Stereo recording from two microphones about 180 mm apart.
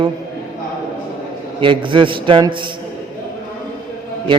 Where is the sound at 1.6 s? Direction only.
25° right (ahead or behind).